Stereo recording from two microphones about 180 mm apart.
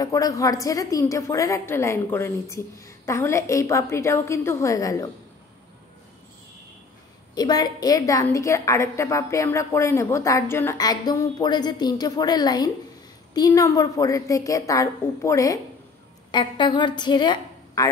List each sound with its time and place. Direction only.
0.0 s a woman's voice: 20° left (ahead or behind)
7.3 s a woman's voice: 20° left (ahead or behind)